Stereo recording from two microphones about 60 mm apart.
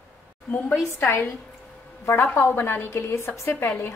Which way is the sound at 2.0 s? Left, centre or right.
Left.